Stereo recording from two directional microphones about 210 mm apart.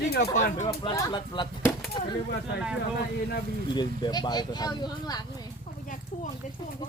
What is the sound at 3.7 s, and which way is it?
Speech, 20° left (ahead or behind).